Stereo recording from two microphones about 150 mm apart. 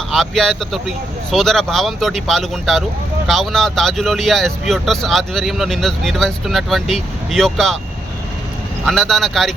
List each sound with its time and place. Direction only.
0.1 s speech: centre (ahead or behind)
8.9 s speech: centre (ahead or behind)